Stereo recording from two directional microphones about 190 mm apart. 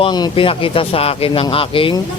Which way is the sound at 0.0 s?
25° left (ahead or behind).